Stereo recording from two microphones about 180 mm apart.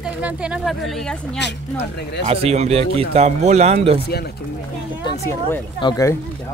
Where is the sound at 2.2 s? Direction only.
35° right (ahead or behind).